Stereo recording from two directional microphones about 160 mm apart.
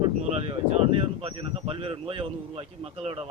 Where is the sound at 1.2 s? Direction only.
35° right (ahead or behind).